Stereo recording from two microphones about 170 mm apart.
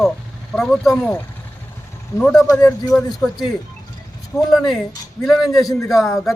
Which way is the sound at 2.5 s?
20° left (ahead or behind).